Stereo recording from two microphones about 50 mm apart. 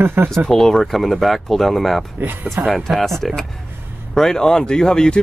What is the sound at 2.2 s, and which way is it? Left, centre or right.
Speech, right.